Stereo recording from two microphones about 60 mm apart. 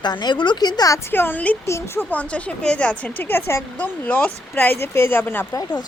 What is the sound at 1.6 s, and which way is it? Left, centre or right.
Speech, left.